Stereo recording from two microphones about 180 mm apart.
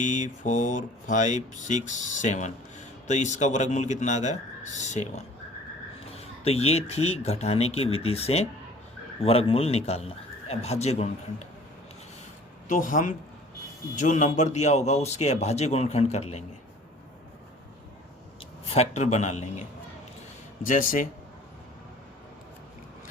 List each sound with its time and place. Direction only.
0.0 s a man's voice: 45° left (ahead or behind)
12.6 s a man's voice: 45° left (ahead or behind)
18.7 s a man's voice: 35° left (ahead or behind)
20.7 s speech: 45° left (ahead or behind)